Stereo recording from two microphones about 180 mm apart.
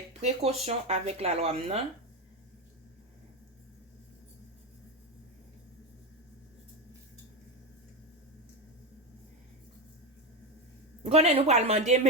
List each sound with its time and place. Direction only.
0.1 s speech: 35° right (ahead or behind)
11.0 s speech: 35° right (ahead or behind)